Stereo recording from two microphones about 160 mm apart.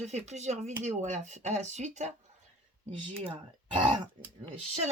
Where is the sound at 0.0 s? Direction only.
45° right (ahead or behind).